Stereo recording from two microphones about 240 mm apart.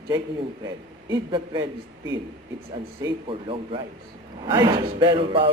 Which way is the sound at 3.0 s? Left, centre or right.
Right.